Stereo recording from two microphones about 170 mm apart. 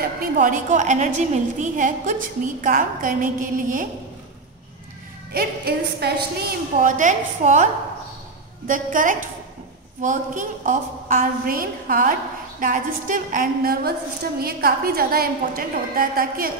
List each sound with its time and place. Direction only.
0.0 s a woman's voice: 55° right (ahead or behind)
5.3 s a woman's voice: 65° right (ahead or behind)
6.8 s a woman's voice: 50° right (ahead or behind)
8.6 s a woman's voice: 50° right (ahead or behind)